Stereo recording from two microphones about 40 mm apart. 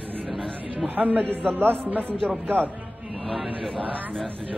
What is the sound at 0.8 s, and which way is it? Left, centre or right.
A man's voice, right.